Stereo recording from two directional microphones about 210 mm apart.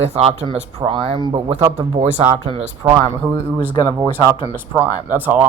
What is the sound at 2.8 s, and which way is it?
Speech, 10° right (ahead or behind).